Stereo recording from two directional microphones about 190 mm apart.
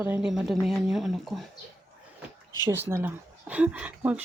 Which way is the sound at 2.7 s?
10° right (ahead or behind).